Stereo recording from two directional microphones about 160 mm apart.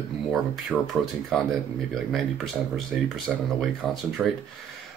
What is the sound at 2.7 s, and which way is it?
Speech, centre (ahead or behind).